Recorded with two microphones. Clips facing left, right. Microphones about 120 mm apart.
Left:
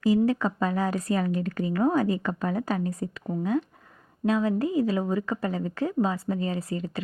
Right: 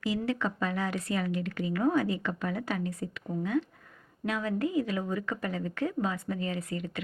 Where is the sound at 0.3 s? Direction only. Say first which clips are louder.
Left 5 dB; 35° left (ahead or behind).